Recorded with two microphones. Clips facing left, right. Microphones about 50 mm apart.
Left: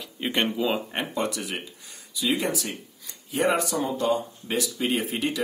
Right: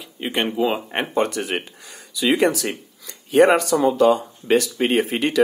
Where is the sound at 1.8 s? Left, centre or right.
Right.